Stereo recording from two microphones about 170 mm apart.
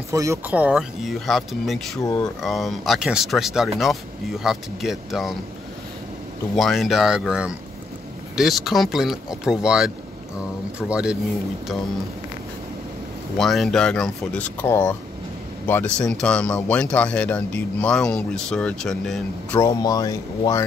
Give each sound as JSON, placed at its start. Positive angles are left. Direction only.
{"t": 0.1, "sound": "speech", "side_deg": -20}
{"t": 6.5, "sound": "speech", "side_deg": 0}
{"t": 13.4, "sound": "speech", "side_deg": 0}
{"t": 19.6, "sound": "speech", "side_deg": 20}